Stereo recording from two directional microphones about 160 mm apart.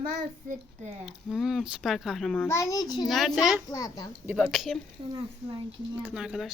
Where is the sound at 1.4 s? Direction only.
Centre (ahead or behind).